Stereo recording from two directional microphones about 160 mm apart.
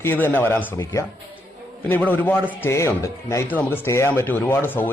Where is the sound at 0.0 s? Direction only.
10° left (ahead or behind).